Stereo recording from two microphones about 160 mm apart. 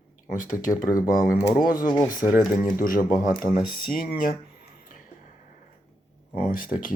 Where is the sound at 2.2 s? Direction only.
5° right (ahead or behind).